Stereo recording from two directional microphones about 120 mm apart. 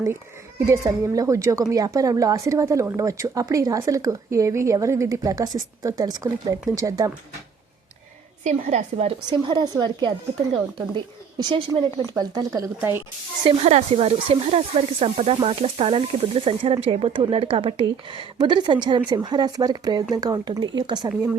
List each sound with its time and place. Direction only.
0.6 s speech: 25° right (ahead or behind)
8.4 s a woman's voice: 70° right (ahead or behind); by 13.0 s 25° right (ahead or behind)
13.4 s a woman's voice: 55° right (ahead or behind); by 21.1 s 40° right (ahead or behind)